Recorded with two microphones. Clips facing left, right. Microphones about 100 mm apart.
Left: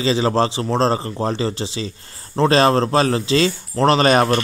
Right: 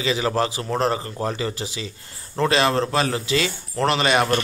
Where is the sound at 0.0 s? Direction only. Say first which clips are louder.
Left 4 dB; 30° left (ahead or behind).